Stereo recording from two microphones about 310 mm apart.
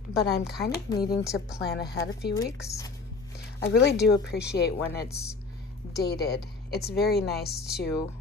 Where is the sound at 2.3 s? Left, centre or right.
Centre.